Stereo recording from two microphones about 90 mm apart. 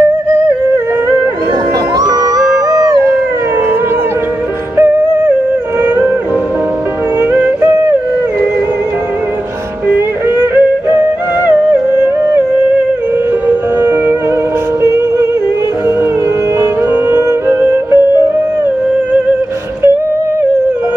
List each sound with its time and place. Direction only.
2.0 s howl: 45° right (ahead or behind)
4.7 s music: 30° right (ahead or behind)
7.2 s music: 20° right (ahead or behind)
9.9 s music: 25° right (ahead or behind)
13.5 s music: 25° right (ahead or behind)
16.9 s music: 25° right (ahead or behind)